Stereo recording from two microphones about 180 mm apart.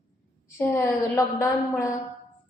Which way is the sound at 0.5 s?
15° left (ahead or behind).